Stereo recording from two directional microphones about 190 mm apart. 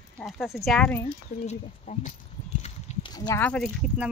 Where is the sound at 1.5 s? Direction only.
40° left (ahead or behind).